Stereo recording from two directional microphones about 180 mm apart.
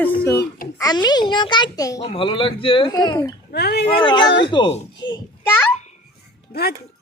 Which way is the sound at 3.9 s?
25° left (ahead or behind).